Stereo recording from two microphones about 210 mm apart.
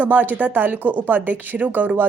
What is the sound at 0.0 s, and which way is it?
A woman's voice, 10° right (ahead or behind).